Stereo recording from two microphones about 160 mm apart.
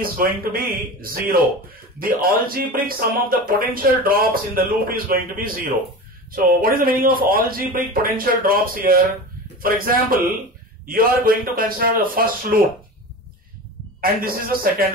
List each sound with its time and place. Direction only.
0.0 s speech: 65° right (ahead or behind)
14.0 s speech: 65° right (ahead or behind)